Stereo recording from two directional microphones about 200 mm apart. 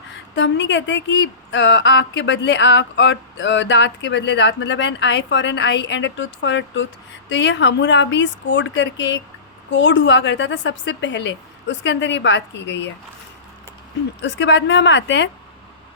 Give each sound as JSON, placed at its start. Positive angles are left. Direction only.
{"t": 0.3, "sound": "a woman's voice", "side_deg": 65}
{"t": 14.2, "sound": "a woman's voice", "side_deg": 65}